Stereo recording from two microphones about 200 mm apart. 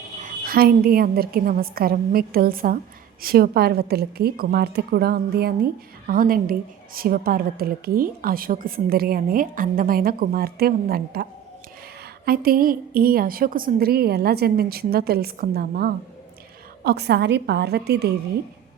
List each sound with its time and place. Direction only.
0.2 s a woman's voice: 45° right (ahead or behind)